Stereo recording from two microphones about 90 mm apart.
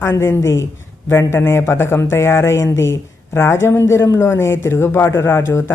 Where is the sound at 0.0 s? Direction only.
25° left (ahead or behind).